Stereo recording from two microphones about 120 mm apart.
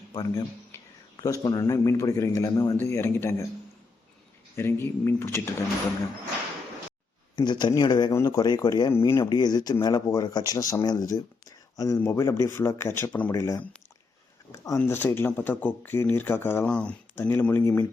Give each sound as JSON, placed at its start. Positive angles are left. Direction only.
{"t": 0.1, "sound": "a man's voice", "side_deg": 30}
{"t": 4.5, "sound": "a man's voice", "side_deg": 20}
{"t": 7.3, "sound": "speech", "side_deg": 40}
{"t": 8.1, "sound": "a man's voice", "side_deg": 25}
{"t": 8.9, "sound": "a man's voice", "side_deg": 20}
{"t": 9.3, "sound": "a man's voice", "side_deg": 35}
{"t": 13.3, "sound": "a man's voice", "side_deg": 25}
{"t": 14.8, "sound": "speech", "side_deg": 15}
{"t": 16.6, "sound": "speech", "side_deg": 10}